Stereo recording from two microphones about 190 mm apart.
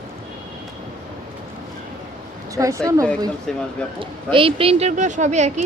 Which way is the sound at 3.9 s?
25° right (ahead or behind).